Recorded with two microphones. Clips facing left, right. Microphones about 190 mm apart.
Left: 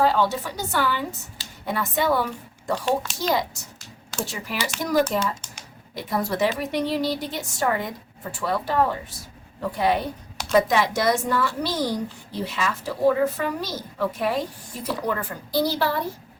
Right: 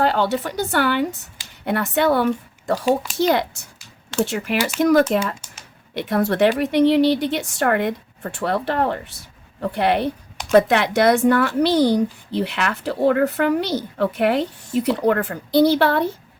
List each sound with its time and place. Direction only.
0.0 s a woman's voice: 65° right (ahead or behind)